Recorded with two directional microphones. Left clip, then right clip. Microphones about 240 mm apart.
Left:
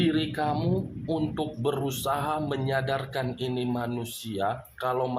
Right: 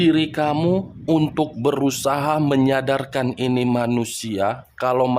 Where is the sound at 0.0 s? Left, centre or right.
Right.